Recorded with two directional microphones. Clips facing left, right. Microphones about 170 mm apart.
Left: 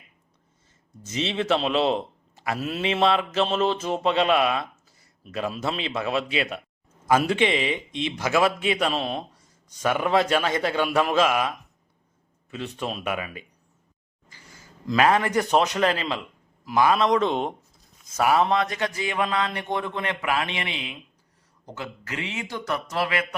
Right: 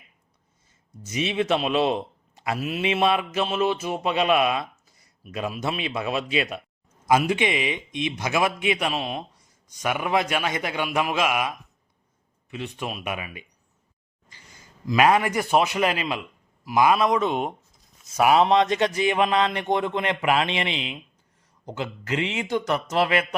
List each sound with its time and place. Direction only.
1.0 s a man's voice: 15° right (ahead or behind)
14.3 s a sound: 20° right (ahead or behind)
14.8 s a man's voice: 15° right (ahead or behind)